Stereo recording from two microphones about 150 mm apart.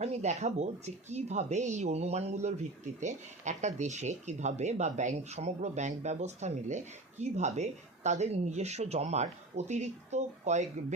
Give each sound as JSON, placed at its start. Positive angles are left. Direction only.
{"t": 0.0, "sound": "speech", "side_deg": -45}